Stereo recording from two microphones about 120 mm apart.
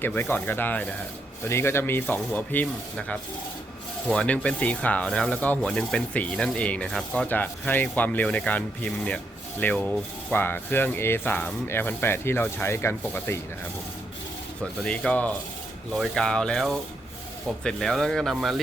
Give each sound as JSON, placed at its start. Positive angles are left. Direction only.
{"t": 0.0, "sound": "rub", "side_deg": 15}
{"t": 4.1, "sound": "rub", "side_deg": 10}
{"t": 14.6, "sound": "rub", "side_deg": 10}
{"t": 15.9, "sound": "speech", "side_deg": 5}